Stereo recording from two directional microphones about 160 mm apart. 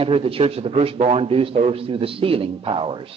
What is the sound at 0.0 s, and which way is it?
A man's voice, 35° right (ahead or behind).